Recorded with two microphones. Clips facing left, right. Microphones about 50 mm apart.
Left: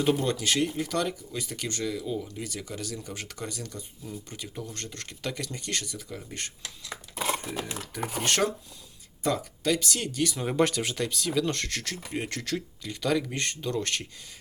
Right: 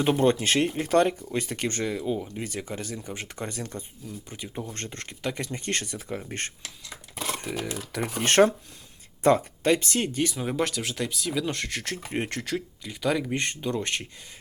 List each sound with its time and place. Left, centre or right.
0.2 s speech: right
4.3 s speech: right
7.2 s a sound: centre
8.2 s speech: right
10.3 s speech: centre
11.9 s speech: right